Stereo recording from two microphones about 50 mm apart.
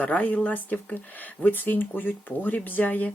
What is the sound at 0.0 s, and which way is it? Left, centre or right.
Speech, left.